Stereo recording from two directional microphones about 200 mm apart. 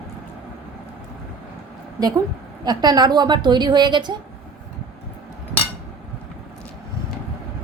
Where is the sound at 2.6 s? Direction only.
20° right (ahead or behind).